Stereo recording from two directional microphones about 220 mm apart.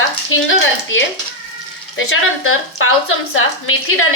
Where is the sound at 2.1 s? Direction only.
70° left (ahead or behind).